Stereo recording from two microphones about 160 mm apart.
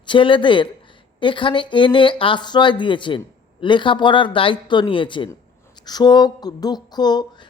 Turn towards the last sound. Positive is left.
turn(degrees=25)  # may be behind; listen again after turning